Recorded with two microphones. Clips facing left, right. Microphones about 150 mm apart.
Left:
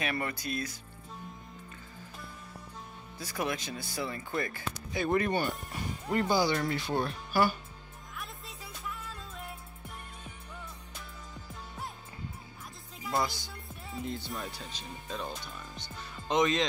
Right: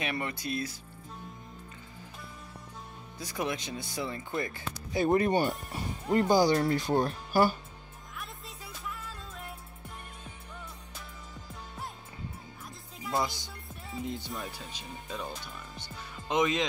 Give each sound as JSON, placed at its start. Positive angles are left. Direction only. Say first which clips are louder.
{"t": 0.0, "sound": "speech", "louder": "even", "side_deg": -25}
{"t": 3.2, "sound": "speech", "louder": "even", "side_deg": -20}
{"t": 4.9, "sound": "speech", "louder": "right 4 dB", "side_deg": -35}
{"t": 5.7, "sound": "music", "louder": "right 3 dB", "side_deg": -25}
{"t": 6.3, "sound": "speech", "louder": "right 5 dB", "side_deg": -40}
{"t": 8.2, "sound": "music", "louder": "even", "side_deg": 0}
{"t": 13.0, "sound": "music", "louder": "even", "side_deg": 0}
{"t": 14.0, "sound": "speech", "louder": "even", "side_deg": -15}